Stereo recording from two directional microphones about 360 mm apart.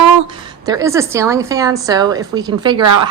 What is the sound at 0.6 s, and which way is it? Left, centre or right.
A woman's voice, centre.